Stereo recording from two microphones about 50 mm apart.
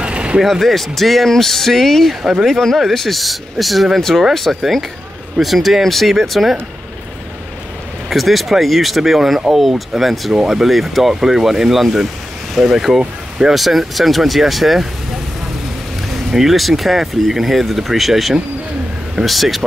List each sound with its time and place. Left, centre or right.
0.0 s a sound: right
0.4 s speech: centre
8.1 s speech: centre
16.3 s speech: centre